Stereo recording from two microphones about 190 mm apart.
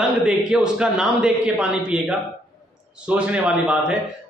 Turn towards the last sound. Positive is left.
turn(degrees=-5)  # may be behind; listen again after turning